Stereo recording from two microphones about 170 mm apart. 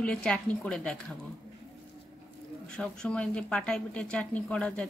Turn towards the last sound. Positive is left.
turn(degrees=5)  # may be behind; listen again after turning